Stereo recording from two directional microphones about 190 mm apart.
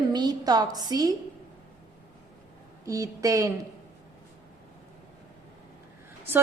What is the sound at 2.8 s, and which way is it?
Speech, 15° right (ahead or behind).